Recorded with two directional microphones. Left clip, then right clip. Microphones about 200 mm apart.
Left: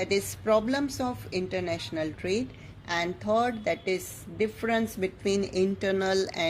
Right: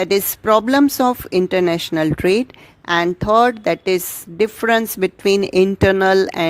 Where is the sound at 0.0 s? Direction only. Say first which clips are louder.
Right 11 dB; 50° right (ahead or behind).